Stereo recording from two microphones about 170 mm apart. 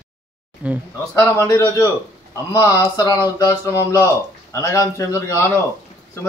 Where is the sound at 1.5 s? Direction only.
20° left (ahead or behind).